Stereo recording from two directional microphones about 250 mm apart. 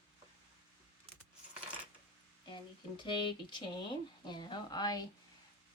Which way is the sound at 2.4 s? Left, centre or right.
Centre.